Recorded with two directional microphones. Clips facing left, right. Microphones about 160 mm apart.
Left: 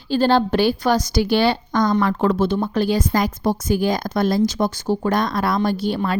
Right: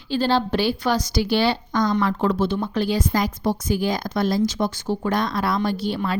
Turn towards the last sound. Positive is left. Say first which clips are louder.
# left 3 dB
turn(degrees=45)  # may be behind; listen again after turning